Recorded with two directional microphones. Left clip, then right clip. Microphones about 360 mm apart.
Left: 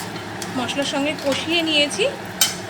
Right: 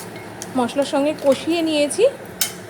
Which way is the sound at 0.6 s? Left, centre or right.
Centre.